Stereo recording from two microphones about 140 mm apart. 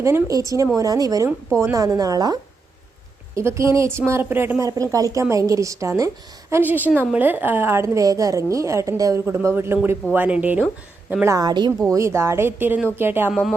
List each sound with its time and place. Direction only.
0.0 s a woman's voice: 25° right (ahead or behind)
11.9 s speech: 20° right (ahead or behind)
13.3 s speech: centre (ahead or behind)